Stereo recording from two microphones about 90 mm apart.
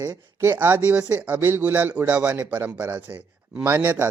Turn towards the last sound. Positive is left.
turn(degrees=-25)  # may be behind; listen again after turning